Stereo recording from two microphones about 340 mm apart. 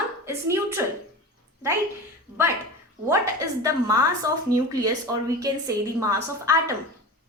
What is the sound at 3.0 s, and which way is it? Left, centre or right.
A woman's voice, centre.